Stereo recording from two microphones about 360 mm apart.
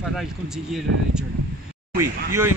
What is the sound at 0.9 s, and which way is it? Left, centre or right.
Speech, right.